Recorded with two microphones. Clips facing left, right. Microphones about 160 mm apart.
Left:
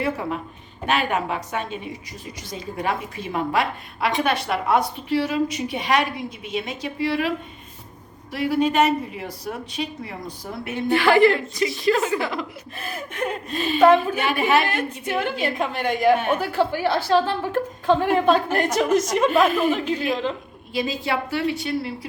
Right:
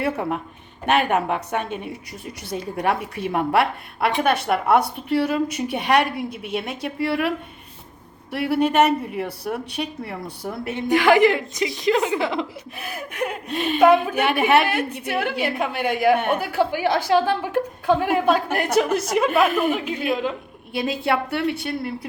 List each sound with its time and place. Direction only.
0.0 s a woman's voice: 55° right (ahead or behind)
10.8 s a woman's voice: 15° right (ahead or behind)
13.5 s a woman's voice: 65° right (ahead or behind)
13.7 s a woman's voice: 10° right (ahead or behind)
14.2 s a woman's voice: 65° right (ahead or behind)
15.0 s a woman's voice: 10° right (ahead or behind)
20.7 s a woman's voice: 60° right (ahead or behind)